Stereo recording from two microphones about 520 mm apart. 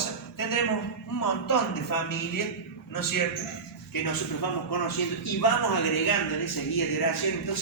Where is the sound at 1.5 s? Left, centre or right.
Left.